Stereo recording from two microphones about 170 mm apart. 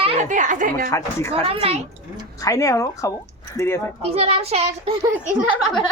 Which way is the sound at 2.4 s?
20° left (ahead or behind).